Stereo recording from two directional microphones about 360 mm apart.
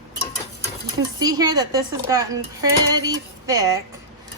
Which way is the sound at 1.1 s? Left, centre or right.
Centre.